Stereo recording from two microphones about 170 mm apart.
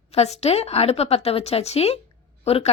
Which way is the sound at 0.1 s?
40° left (ahead or behind).